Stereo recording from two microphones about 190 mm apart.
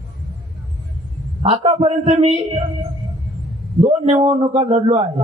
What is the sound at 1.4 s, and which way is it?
A man's voice, 30° right (ahead or behind).